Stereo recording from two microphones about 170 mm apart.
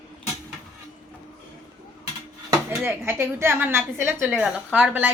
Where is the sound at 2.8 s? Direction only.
15° right (ahead or behind).